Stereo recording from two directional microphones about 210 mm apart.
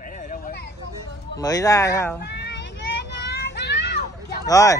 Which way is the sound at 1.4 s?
15° left (ahead or behind).